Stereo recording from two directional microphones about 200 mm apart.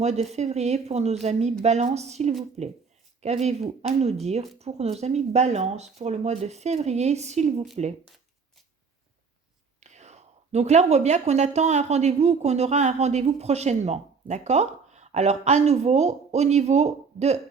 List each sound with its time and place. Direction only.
0.0 s speech: 35° right (ahead or behind)
9.8 s speech: 35° right (ahead or behind)